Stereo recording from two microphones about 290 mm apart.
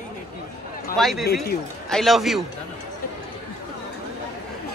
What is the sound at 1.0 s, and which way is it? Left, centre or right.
Speech, centre.